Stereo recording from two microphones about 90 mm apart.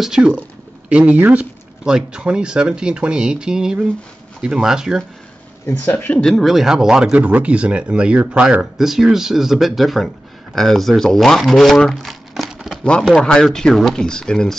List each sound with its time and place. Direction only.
0.0 s speech: 10° right (ahead or behind)
5.7 s speech: 20° left (ahead or behind)
6.1 s speech: 5° left (ahead or behind)